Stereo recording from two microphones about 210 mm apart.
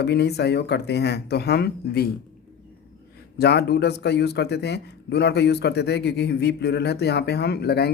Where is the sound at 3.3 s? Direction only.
50° left (ahead or behind).